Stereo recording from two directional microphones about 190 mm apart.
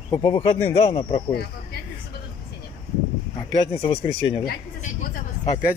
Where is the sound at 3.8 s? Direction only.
30° left (ahead or behind).